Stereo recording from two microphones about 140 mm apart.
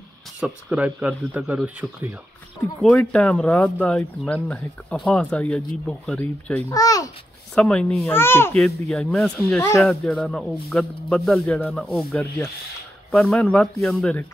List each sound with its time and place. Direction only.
0.4 s speech: 10° right (ahead or behind)
2.8 s speech: 10° left (ahead or behind)
6.7 s a child's voice: 25° left (ahead or behind)
7.5 s speech: 5° left (ahead or behind)
8.1 s speech: 15° left (ahead or behind)
8.5 s speech: 5° left (ahead or behind)
9.6 s a child's voice: 20° left (ahead or behind)
10.0 s speech: 5° left (ahead or behind)